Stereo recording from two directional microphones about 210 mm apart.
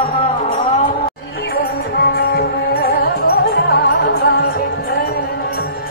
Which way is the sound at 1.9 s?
50° left (ahead or behind).